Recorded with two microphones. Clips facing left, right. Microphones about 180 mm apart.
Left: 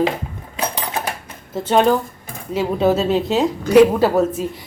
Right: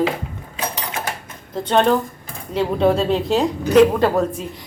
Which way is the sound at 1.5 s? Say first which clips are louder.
Left 1 dB; 5° left (ahead or behind).